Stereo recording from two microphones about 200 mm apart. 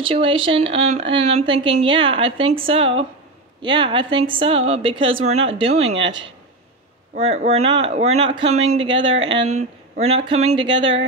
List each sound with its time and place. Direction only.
0.0 s speech: 25° right (ahead or behind)
7.2 s speech: 35° right (ahead or behind)